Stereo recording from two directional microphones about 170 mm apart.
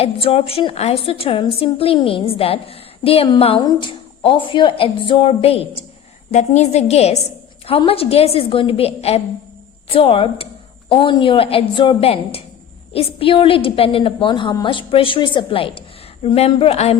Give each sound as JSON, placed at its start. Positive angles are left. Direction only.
{"t": 0.0, "sound": "a woman's voice", "side_deg": 35}